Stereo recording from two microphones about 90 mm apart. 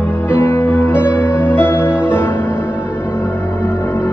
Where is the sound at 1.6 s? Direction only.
25° left (ahead or behind).